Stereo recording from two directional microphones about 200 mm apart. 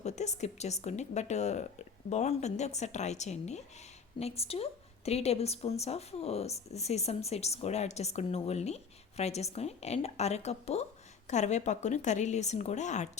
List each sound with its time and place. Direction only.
0.0 s a woman's voice: 35° left (ahead or behind)